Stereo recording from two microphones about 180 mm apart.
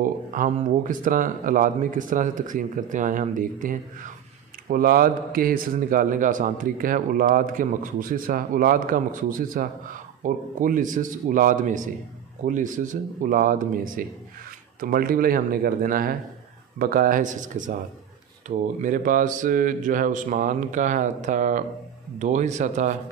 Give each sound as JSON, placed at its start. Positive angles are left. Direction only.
{"t": 0.0, "sound": "a man's voice", "side_deg": -50}
{"t": 18.8, "sound": "a man's voice", "side_deg": -45}